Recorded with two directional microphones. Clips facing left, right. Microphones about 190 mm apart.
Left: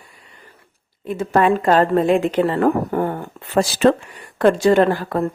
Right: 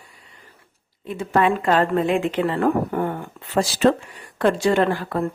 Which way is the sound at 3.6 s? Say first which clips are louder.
Left 3 dB; 60° left (ahead or behind).